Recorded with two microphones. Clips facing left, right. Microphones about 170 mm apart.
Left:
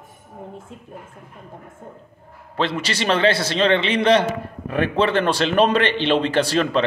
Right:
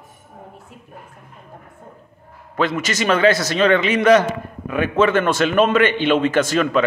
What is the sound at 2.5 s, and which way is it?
A man's voice, 30° left (ahead or behind).